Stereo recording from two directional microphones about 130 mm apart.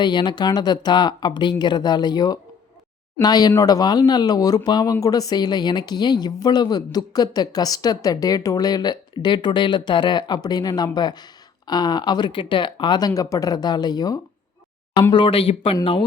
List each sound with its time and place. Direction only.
0.0 s speech: 35° left (ahead or behind)
15.1 s speech: 45° left (ahead or behind)